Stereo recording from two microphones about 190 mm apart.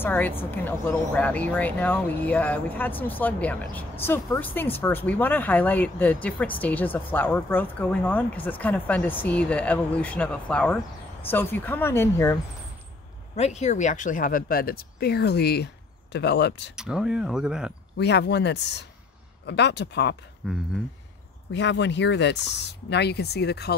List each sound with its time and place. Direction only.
0.0 s speech: 10° left (ahead or behind)
13.4 s speech: 35° left (ahead or behind); by 16.7 s 65° left (ahead or behind)
16.7 s speech: 5° right (ahead or behind)
17.9 s speech: 65° left (ahead or behind)
20.4 s speech: 5° right (ahead or behind)
21.5 s speech: 70° left (ahead or behind)